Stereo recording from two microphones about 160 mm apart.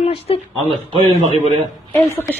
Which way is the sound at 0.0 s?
35° left (ahead or behind).